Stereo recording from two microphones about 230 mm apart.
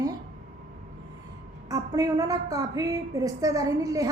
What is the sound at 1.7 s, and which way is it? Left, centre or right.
A woman's voice, centre.